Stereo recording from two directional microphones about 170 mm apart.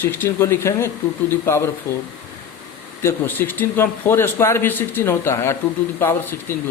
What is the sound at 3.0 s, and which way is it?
Speech, 10° left (ahead or behind).